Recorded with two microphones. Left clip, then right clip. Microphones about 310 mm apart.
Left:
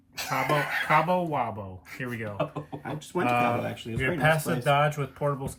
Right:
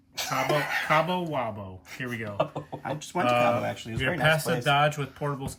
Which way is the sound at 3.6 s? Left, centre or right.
Right.